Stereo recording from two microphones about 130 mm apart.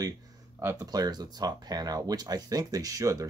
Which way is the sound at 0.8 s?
30° right (ahead or behind).